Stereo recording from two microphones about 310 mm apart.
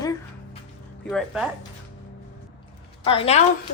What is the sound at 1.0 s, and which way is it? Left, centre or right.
Speech, centre.